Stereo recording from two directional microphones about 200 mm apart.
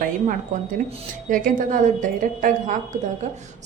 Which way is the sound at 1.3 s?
40° right (ahead or behind).